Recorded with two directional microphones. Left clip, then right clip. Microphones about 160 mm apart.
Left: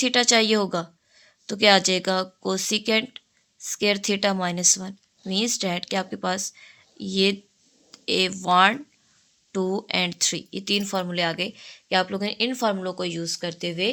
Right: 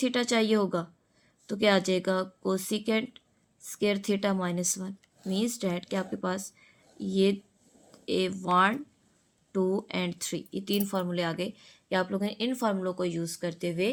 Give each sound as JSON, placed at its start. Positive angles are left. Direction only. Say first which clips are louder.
{"t": 0.0, "sound": "a woman's voice", "louder": "left 8 dB", "side_deg": 15}